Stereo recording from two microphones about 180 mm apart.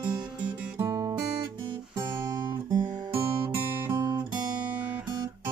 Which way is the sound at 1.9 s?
20° right (ahead or behind).